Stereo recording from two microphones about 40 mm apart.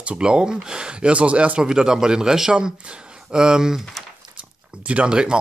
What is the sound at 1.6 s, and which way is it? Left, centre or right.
Speech, centre.